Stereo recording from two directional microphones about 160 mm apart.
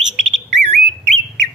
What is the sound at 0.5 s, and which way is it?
Bird, 45° right (ahead or behind).